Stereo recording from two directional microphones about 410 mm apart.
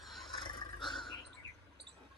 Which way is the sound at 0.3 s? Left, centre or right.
Centre.